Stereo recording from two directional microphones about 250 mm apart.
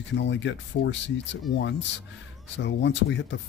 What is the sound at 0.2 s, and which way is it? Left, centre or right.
Speech, left.